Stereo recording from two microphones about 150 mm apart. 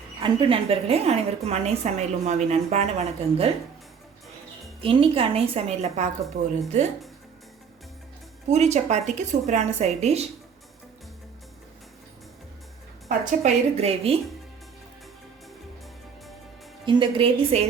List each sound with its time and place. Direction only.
0.2 s a woman's voice: 35° right (ahead or behind)
4.8 s a woman's voice: 35° right (ahead or behind)
8.4 s a woman's voice: 50° right (ahead or behind)
13.1 s a woman's voice: 45° right (ahead or behind)
16.8 s a woman's voice: 35° right (ahead or behind)